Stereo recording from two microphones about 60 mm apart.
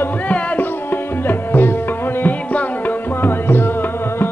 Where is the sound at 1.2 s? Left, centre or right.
Left.